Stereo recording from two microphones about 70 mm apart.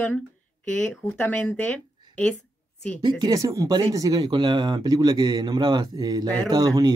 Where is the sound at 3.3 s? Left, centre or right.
Right.